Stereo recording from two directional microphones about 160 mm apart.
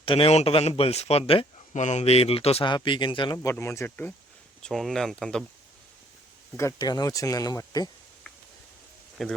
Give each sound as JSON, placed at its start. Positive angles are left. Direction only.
{"t": 0.0, "sound": "speech", "side_deg": 35}
{"t": 1.3, "sound": "a sound", "side_deg": 35}
{"t": 1.8, "sound": "speech", "side_deg": 45}
{"t": 3.3, "sound": "speech", "side_deg": 20}
{"t": 4.6, "sound": "speech", "side_deg": 0}
{"t": 6.6, "sound": "speech", "side_deg": 20}
{"t": 9.2, "sound": "speech", "side_deg": 0}